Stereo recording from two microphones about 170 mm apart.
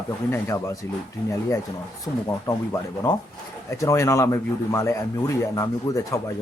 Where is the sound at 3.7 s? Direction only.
20° left (ahead or behind).